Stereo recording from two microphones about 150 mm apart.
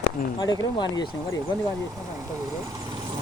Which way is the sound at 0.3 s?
30° left (ahead or behind).